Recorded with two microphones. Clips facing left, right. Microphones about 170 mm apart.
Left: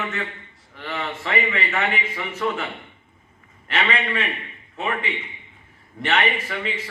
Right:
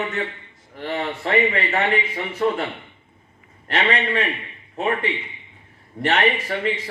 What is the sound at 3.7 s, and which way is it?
A man's voice, 35° right (ahead or behind).